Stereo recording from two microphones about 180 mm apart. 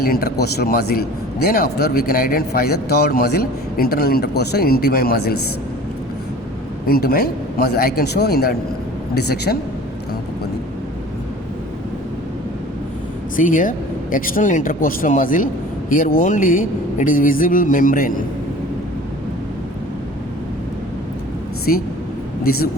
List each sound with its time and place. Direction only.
0.0 s a man's voice: 55° left (ahead or behind)
6.8 s a man's voice: 55° left (ahead or behind)
13.3 s speech: 45° left (ahead or behind)
21.7 s speech: 50° left (ahead or behind)